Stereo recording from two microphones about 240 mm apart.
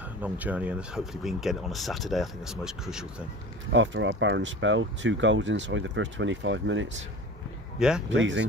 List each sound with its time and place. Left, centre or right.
0.2 s speech: centre
3.7 s speech: right
8.1 s speech: right